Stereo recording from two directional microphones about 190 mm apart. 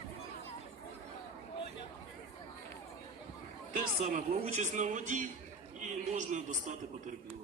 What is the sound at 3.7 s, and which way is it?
Speech, 40° right (ahead or behind).